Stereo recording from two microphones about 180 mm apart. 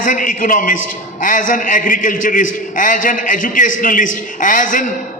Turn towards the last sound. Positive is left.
turn(degrees=45)  # may be behind; listen again after turning